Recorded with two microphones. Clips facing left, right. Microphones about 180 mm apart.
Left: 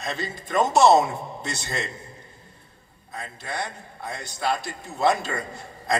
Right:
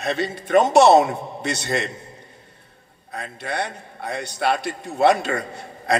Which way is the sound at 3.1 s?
65° right (ahead or behind).